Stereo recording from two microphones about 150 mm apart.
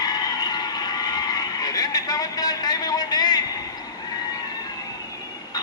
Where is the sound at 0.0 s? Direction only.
25° left (ahead or behind).